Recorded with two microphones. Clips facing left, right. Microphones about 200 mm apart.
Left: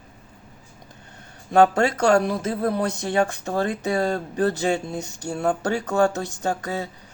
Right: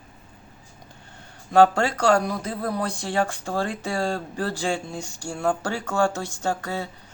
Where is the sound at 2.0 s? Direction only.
25° left (ahead or behind).